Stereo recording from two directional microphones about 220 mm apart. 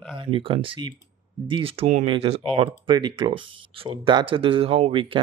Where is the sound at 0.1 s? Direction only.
25° right (ahead or behind).